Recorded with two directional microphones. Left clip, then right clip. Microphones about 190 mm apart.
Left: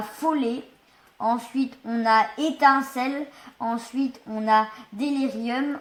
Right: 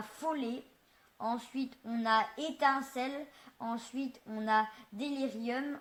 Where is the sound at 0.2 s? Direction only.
45° right (ahead or behind).